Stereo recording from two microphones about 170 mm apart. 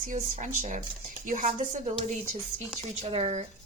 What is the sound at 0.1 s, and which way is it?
Speech, 45° right (ahead or behind).